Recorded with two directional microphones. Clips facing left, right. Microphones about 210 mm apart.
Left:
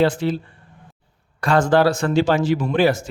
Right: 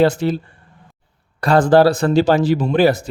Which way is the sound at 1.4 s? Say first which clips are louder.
Right 4 dB; 35° right (ahead or behind).